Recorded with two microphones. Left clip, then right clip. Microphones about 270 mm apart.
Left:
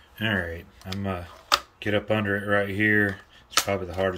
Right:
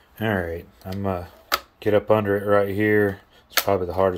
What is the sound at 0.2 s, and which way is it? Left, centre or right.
Speech, centre.